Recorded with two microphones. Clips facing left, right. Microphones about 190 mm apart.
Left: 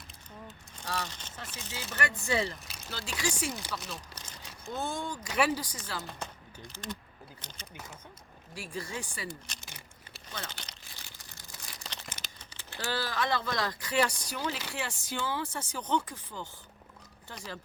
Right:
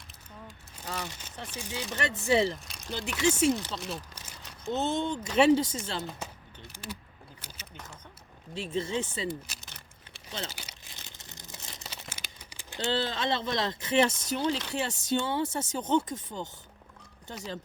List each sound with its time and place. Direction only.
0.4 s a sound: 5° right (ahead or behind)
0.9 s speech: 15° right (ahead or behind)
2.6 s a sound: centre (ahead or behind)
2.9 s speech: 20° right (ahead or behind)
3.5 s speech: 10° left (ahead or behind)
3.8 s speech: centre (ahead or behind)
4.6 s speech: 20° right (ahead or behind)
6.1 s speech: 5° right (ahead or behind)
7.4 s a sound: 5° right (ahead or behind)
8.5 s speech: 25° right (ahead or behind)
9.6 s a sound: 10° left (ahead or behind)
10.5 s crumpling: 5° right (ahead or behind)
10.9 s crumpling: 20° right (ahead or behind)
11.8 s speech: 5° right (ahead or behind); by 16.5 s 25° right (ahead or behind)